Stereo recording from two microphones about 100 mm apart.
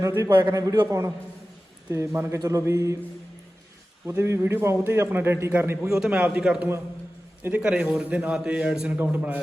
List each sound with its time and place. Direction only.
0.1 s a man's voice: 30° right (ahead or behind)
0.3 s a man's voice: 40° right (ahead or behind)
4.0 s a man's voice: 30° right (ahead or behind)
5.9 s a man's voice: 10° right (ahead or behind)